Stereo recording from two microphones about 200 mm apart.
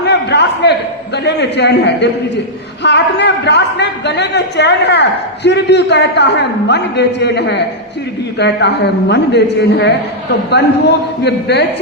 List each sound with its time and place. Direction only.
0.0 s a man's voice: 60° left (ahead or behind)